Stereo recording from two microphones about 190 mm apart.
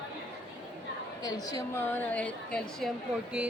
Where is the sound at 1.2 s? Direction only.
20° left (ahead or behind).